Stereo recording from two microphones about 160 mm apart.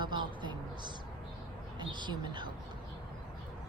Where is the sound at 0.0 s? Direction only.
30° right (ahead or behind).